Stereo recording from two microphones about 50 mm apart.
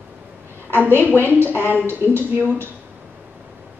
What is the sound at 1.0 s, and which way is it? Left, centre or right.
Speech, left.